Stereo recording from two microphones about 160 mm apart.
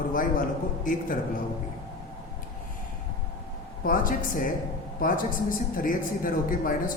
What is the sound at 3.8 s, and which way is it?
A woman's voice, 60° left (ahead or behind).